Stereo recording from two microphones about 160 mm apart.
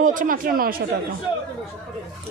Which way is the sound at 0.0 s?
55° right (ahead or behind).